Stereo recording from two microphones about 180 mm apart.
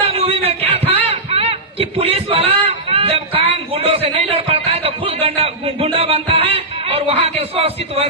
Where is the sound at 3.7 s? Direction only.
35° right (ahead or behind).